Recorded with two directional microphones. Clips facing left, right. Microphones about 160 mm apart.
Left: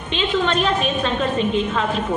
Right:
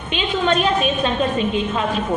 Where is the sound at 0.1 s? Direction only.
15° right (ahead or behind).